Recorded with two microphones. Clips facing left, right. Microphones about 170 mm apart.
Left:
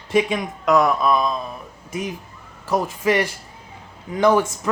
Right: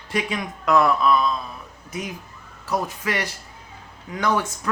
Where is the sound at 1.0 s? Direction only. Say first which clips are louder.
Left 1 dB; 15° left (ahead or behind).